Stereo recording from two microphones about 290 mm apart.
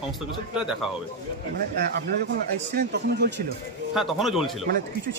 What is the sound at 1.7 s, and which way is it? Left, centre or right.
A man's voice, right.